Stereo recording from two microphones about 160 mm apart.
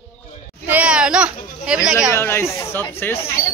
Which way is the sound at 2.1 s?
15° left (ahead or behind).